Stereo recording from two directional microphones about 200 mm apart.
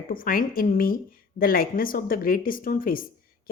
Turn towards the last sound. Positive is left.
turn(degrees=45)  # may be behind; listen again after turning